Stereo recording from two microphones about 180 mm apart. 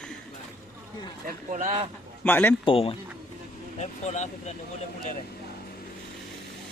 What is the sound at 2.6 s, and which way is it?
Speech, 30° left (ahead or behind).